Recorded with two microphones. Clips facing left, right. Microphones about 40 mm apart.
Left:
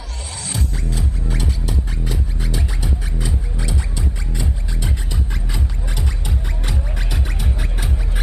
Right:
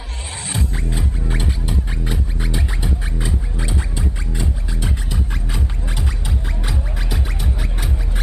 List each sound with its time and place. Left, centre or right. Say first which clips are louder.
0.5 s music: right 1 dB; right